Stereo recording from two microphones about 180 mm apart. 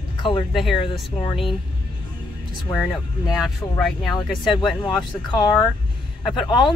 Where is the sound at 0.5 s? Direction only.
Centre (ahead or behind).